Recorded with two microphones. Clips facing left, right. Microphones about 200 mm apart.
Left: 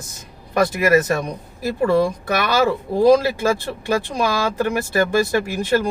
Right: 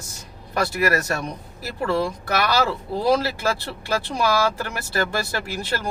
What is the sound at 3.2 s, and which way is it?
Speech, 15° left (ahead or behind).